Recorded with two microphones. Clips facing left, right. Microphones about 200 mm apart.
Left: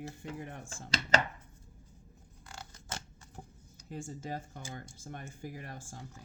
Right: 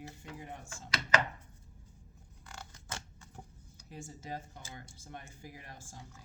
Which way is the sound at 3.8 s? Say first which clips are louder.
Left 4 dB; 50° left (ahead or behind).